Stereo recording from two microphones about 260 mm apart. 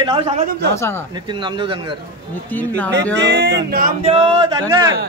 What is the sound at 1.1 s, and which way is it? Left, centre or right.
Speech, centre.